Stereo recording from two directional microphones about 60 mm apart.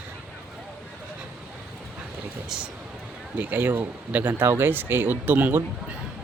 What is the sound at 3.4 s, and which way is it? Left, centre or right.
Speech, right.